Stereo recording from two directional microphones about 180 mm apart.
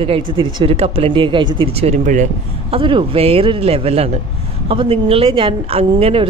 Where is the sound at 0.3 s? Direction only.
25° right (ahead or behind).